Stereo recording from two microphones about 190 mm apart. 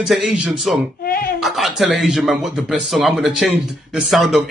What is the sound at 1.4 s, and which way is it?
Speech, centre (ahead or behind).